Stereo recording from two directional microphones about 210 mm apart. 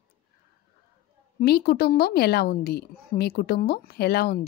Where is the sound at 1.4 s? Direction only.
50° left (ahead or behind).